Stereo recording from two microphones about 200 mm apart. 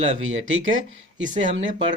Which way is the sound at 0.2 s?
80° right.